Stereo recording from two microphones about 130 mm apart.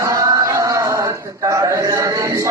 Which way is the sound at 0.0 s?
25° right (ahead or behind).